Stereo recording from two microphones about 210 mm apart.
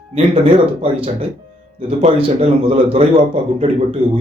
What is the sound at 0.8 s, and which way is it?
A man's voice, 25° right (ahead or behind).